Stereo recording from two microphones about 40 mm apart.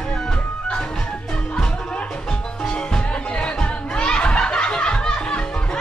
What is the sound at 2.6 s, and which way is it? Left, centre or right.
Music, left.